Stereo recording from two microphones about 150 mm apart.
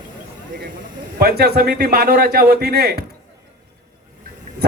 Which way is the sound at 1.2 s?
90° right.